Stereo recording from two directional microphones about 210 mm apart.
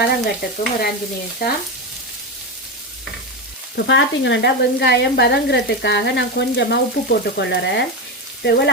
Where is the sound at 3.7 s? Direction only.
60° left (ahead or behind).